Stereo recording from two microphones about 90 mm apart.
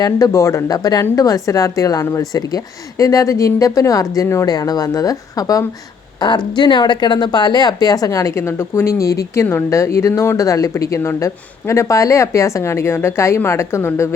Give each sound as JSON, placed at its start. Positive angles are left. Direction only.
{"t": 0.3, "sound": "speech", "side_deg": 30}
{"t": 0.7, "sound": "speech", "side_deg": 45}
{"t": 6.1, "sound": "speech", "side_deg": 55}